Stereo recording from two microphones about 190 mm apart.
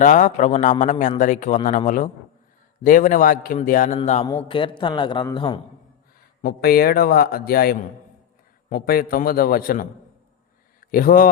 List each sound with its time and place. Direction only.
0.0 s a man's voice: 40° left (ahead or behind)
2.8 s a man's voice: 45° left (ahead or behind); by 5.5 s 25° left (ahead or behind)
6.4 s a man's voice: 55° left (ahead or behind)